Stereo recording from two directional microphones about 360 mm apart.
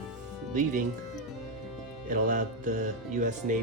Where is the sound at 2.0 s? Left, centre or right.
Right.